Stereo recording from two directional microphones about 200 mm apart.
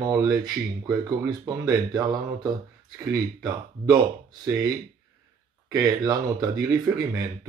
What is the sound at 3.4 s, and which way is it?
Speech, 15° right (ahead or behind).